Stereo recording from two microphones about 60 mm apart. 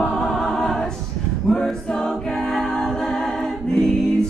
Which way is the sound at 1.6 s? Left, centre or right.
Centre.